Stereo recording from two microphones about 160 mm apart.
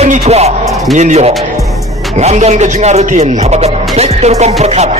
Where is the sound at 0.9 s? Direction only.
45° right (ahead or behind).